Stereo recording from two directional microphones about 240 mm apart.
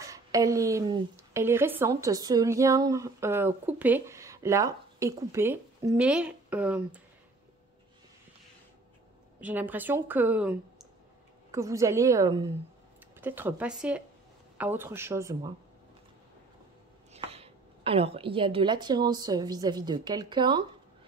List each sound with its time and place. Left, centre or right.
0.0 s a woman's voice: centre
9.4 s speech: centre
17.1 s a woman's voice: right